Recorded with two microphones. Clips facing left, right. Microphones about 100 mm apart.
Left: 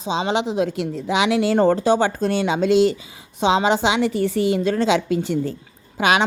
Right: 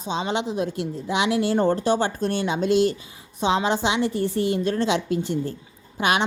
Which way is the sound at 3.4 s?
90° left.